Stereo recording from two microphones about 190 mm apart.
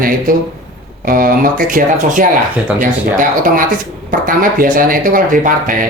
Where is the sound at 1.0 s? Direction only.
45° right (ahead or behind).